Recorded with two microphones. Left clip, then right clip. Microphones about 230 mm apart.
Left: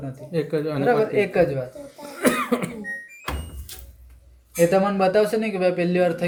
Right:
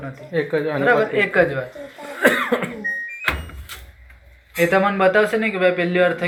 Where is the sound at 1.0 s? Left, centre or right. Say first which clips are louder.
Right 2 dB; centre.